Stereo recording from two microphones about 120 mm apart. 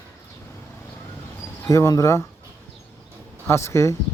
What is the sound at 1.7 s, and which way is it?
Speech, 25° left (ahead or behind).